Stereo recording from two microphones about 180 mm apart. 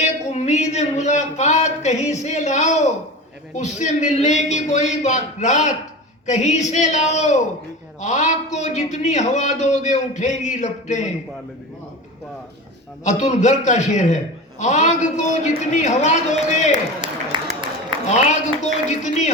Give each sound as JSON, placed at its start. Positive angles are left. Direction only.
{"t": 0.0, "sound": "a man's voice", "side_deg": 40}
{"t": 13.1, "sound": "a man's voice", "side_deg": 40}
{"t": 17.3, "sound": "a sound", "side_deg": -25}
{"t": 18.1, "sound": "a man's voice", "side_deg": 40}